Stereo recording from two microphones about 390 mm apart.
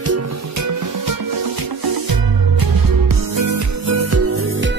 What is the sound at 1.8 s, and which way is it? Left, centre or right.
Music, right.